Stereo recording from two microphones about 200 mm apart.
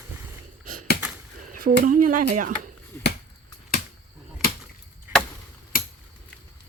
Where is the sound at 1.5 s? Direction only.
45° right (ahead or behind).